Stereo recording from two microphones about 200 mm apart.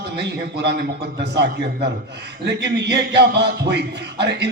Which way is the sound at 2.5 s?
55° right (ahead or behind).